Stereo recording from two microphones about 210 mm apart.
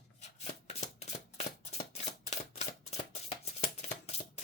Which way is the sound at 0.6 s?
30° left (ahead or behind).